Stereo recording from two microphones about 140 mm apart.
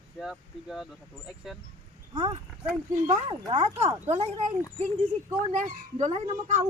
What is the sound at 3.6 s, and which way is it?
Speech, 50° right (ahead or behind).